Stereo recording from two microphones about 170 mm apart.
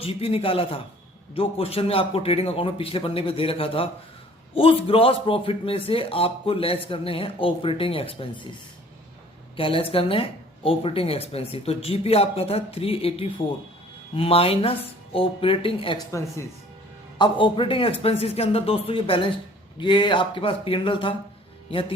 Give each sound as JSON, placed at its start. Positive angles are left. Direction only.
{"t": 0.0, "sound": "speech", "side_deg": 35}
{"t": 9.6, "sound": "speech", "side_deg": 30}
{"t": 17.2, "sound": "speech", "side_deg": 30}